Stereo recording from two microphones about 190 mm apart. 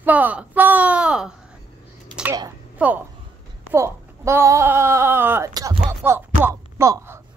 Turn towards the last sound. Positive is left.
turn(degrees=-15)  # may be behind; listen again after turning